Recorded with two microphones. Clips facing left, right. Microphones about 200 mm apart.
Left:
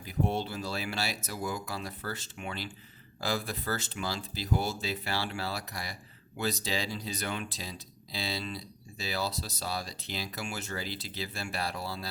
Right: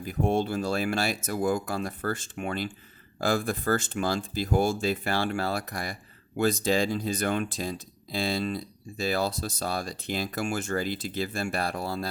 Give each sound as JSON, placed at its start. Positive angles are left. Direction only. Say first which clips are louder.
{"t": 0.0, "sound": "speech", "louder": "right 5 dB", "side_deg": -50}